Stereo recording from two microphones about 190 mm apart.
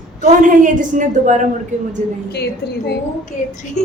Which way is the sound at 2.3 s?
60° left (ahead or behind).